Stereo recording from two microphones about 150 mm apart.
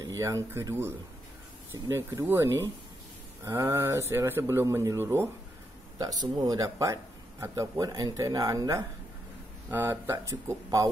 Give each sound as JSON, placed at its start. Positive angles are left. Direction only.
{"t": 0.0, "sound": "speech", "side_deg": -20}